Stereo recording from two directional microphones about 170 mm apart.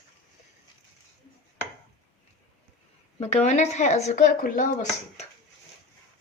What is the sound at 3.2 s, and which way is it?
A woman's voice, 40° left (ahead or behind).